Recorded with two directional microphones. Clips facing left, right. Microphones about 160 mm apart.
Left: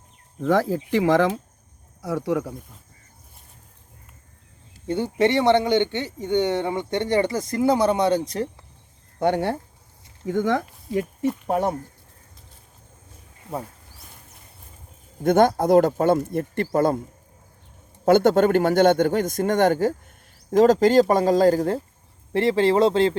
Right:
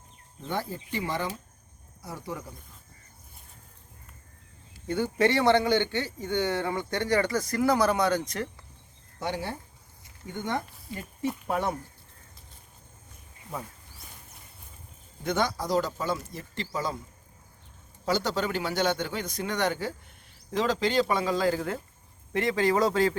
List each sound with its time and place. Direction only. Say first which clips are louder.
0.3 s speech: left 12 dB; 90° left; by 2.6 s 75° left (ahead or behind)
4.9 s speech: left 4 dB; 25° left (ahead or behind)
9.1 s speech: left 11 dB; 60° left (ahead or behind)
10.2 s speech: left 10 dB; 90° left
11.4 s speech: left 6 dB; 40° left (ahead or behind)
15.2 s speech: left 11 dB; 50° left (ahead or behind)
18.0 s a man's voice: left 12 dB; 55° left (ahead or behind); by 23.1 s 25° left (ahead or behind)